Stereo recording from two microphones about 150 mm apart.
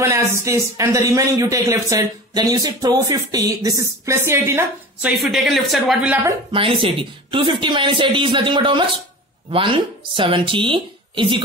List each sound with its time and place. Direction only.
0.0 s speech: 20° right (ahead or behind)
5.2 s speech: centre (ahead or behind)
6.5 s speech: 35° right (ahead or behind)